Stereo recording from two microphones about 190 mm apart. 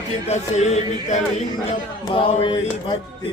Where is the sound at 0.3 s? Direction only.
35° left (ahead or behind).